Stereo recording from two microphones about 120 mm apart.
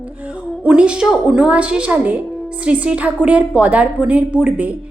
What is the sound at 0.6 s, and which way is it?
A woman's voice, 10° right (ahead or behind).